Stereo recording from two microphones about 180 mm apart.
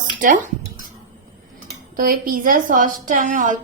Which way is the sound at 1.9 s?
50° right (ahead or behind).